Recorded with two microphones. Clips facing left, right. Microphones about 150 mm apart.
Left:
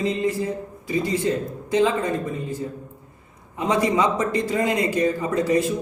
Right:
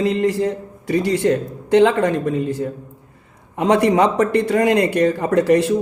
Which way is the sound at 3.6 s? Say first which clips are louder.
Right 6 dB; 65° right (ahead or behind).